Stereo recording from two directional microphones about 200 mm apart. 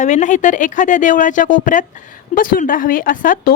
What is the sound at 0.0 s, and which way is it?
A woman's voice, 35° left (ahead or behind).